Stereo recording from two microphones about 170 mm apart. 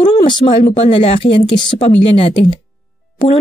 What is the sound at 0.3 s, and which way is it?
Speech, 30° left (ahead or behind).